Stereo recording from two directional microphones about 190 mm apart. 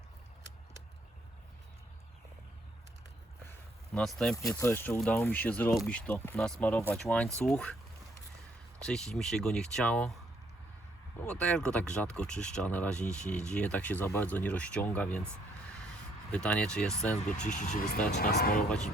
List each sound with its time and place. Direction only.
3.9 s speech: centre (ahead or behind)
4.5 s speech: 15° left (ahead or behind)
8.8 s speech: 5° left (ahead or behind)
11.2 s speech: 5° left (ahead or behind)
16.3 s speech: 5° left (ahead or behind)
17.4 s speech: 40° left (ahead or behind); by 18.6 s 55° left (ahead or behind)